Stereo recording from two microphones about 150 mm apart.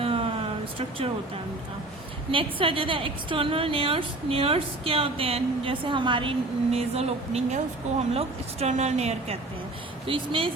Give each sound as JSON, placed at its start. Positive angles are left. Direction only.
{"t": 0.0, "sound": "vehicle", "side_deg": -40}
{"t": 0.8, "sound": "a woman's voice", "side_deg": -40}
{"t": 2.3, "sound": "a woman's voice", "side_deg": -35}